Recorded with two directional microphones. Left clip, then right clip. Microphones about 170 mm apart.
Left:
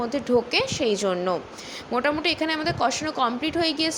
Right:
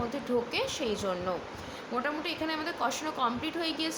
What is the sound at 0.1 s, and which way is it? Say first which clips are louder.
A woman's voice: left 9 dB; 40° left (ahead or behind).